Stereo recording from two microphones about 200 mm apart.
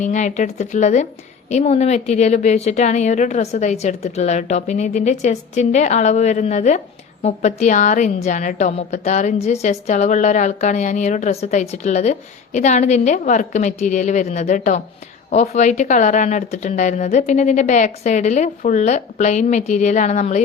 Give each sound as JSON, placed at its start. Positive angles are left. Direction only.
{"t": 0.0, "sound": "a woman's voice", "side_deg": 35}